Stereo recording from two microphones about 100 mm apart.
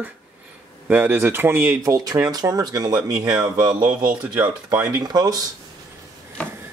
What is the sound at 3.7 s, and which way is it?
Speech, 10° right (ahead or behind).